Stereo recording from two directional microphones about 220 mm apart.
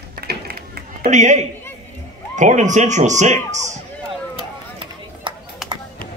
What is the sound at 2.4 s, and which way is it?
Speech, 35° right (ahead or behind).